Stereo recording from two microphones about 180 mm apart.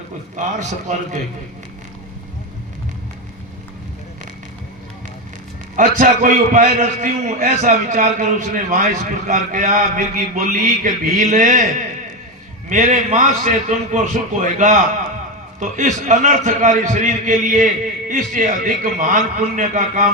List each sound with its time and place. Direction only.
0.3 s a man's voice: 40° right (ahead or behind)
5.7 s a man's voice: 50° right (ahead or behind)